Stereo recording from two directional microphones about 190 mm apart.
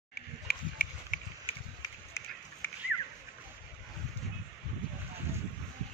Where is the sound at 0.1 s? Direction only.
50° left (ahead or behind).